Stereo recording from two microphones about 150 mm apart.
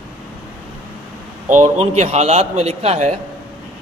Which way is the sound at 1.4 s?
50° right (ahead or behind).